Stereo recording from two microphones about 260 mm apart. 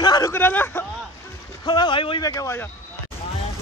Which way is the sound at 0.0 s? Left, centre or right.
Centre.